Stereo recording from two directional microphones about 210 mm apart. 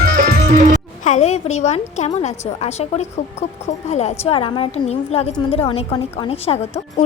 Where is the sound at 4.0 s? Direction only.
30° left (ahead or behind).